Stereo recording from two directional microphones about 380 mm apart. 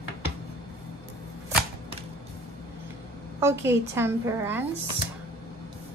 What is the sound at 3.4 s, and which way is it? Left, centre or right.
A woman's voice, centre.